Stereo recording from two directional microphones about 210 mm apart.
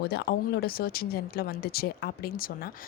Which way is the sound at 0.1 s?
50° left (ahead or behind).